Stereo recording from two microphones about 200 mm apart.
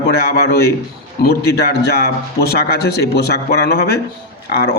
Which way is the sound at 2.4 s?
50° left (ahead or behind).